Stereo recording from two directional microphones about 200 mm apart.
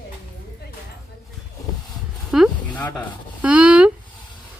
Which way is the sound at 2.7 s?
10° left (ahead or behind).